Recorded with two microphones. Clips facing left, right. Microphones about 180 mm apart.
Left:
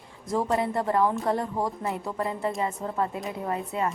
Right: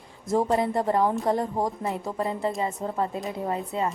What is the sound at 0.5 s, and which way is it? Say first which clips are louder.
Speech: right 1 dB; 30° right (ahead or behind).